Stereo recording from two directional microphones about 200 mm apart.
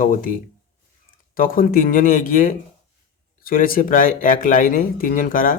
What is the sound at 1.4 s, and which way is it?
Speech, 45° left (ahead or behind).